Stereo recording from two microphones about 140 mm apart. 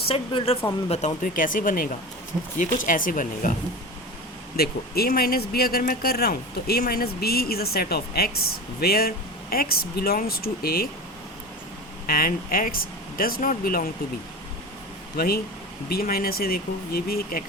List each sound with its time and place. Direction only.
0.1 s speech: 45° left (ahead or behind)
0.9 s speech: 55° left (ahead or behind); by 3.5 s 70° left (ahead or behind)
4.5 s speech: 90° left
12.0 s speech: 90° left
15.1 s speech: 90° left